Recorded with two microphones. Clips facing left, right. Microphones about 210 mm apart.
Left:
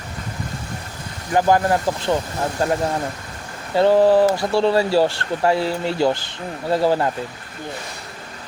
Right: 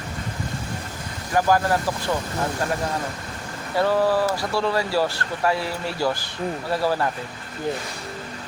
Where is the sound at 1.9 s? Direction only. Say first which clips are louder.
Left 4 dB; 25° left (ahead or behind).